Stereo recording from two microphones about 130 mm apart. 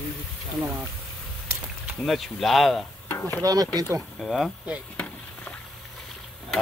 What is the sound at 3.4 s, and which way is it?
Speech, 30° right (ahead or behind).